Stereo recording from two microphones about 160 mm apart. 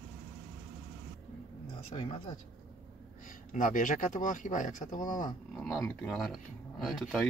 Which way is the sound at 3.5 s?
55° left (ahead or behind).